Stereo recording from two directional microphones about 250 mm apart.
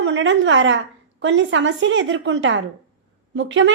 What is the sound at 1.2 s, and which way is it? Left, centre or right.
A woman's voice, right.